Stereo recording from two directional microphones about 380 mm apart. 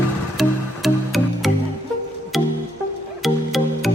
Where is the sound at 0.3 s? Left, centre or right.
Centre.